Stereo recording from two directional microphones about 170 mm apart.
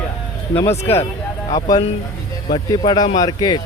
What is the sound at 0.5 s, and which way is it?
Speech, 15° left (ahead or behind).